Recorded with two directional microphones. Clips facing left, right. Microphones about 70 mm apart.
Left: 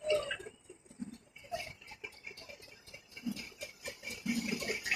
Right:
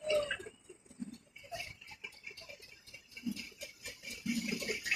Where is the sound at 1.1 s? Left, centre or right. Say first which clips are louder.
Left 4 dB; left.